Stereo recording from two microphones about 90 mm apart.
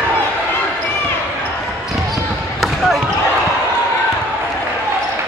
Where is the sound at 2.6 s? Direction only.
Centre (ahead or behind).